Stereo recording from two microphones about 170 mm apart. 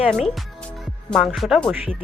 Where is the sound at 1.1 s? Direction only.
Centre (ahead or behind).